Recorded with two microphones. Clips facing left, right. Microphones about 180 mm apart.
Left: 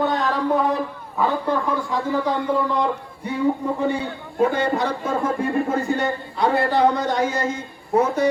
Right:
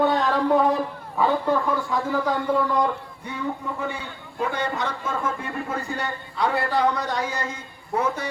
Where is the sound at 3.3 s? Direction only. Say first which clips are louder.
Left 8 dB; 35° left (ahead or behind).